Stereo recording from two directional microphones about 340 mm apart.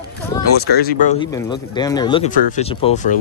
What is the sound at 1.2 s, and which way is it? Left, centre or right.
Speech, centre.